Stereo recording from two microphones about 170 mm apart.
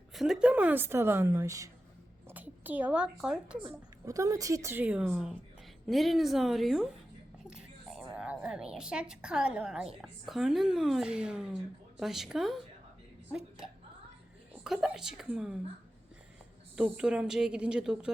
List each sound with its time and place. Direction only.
0.1 s a woman's voice: centre (ahead or behind)
4.0 s a woman's voice: 20° right (ahead or behind); by 12.6 s centre (ahead or behind)
14.6 s a woman's voice: centre (ahead or behind)
16.7 s a woman's voice: 5° right (ahead or behind)